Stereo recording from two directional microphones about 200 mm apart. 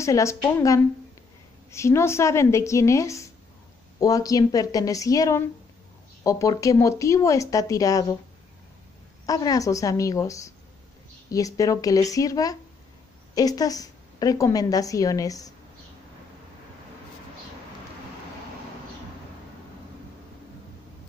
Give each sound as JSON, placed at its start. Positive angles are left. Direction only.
{"t": 0.0, "sound": "a woman's voice", "side_deg": 15}
{"t": 9.2, "sound": "a woman's voice", "side_deg": 20}